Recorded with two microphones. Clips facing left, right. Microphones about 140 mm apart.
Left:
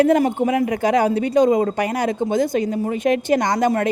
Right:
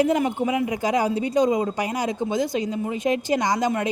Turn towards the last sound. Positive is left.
turn(degrees=60)  # may be behind; listen again after turning